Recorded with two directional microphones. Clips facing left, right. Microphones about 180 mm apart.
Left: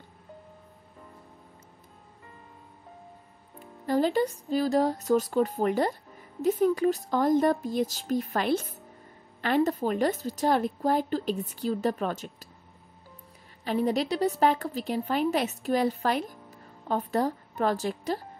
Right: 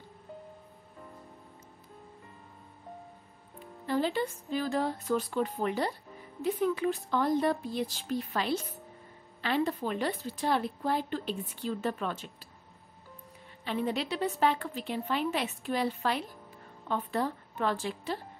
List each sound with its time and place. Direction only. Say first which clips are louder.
3.8 s a woman's voice: left 5 dB; 40° left (ahead or behind)
13.7 s a woman's voice: left 5 dB; 40° left (ahead or behind)